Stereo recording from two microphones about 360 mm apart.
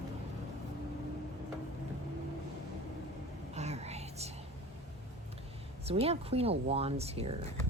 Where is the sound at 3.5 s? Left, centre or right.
Centre.